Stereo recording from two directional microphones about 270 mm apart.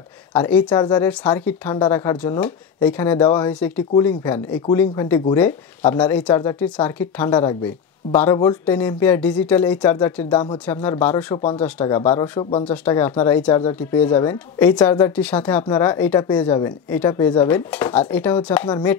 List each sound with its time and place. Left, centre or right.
0.3 s speech: centre